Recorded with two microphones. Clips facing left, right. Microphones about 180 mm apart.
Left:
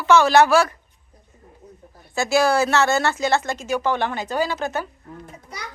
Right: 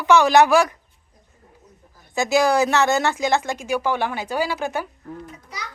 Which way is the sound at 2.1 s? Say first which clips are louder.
Right 1 dB; 15° right (ahead or behind).